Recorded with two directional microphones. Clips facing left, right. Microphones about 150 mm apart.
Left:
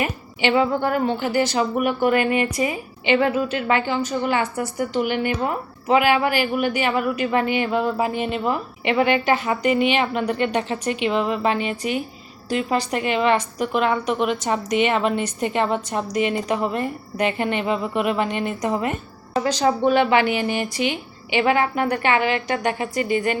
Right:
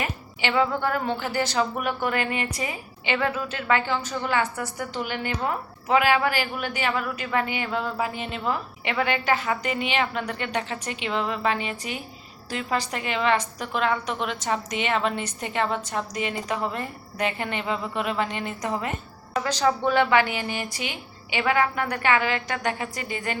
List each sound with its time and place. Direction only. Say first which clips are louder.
0.0 s a woman's voice: left 6 dB; 20° left (ahead or behind)